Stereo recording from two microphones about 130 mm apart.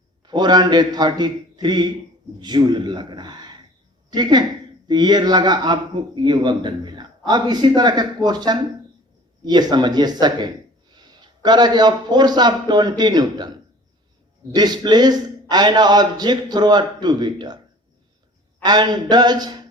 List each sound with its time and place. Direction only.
0.3 s a man's voice: 35° right (ahead or behind)
14.5 s a man's voice: 30° right (ahead or behind)
18.6 s a man's voice: 35° right (ahead or behind)